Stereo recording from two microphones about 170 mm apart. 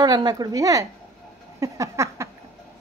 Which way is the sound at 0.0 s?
25° right (ahead or behind).